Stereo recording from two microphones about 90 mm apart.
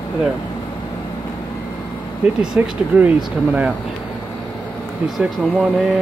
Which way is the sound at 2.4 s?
10° right (ahead or behind).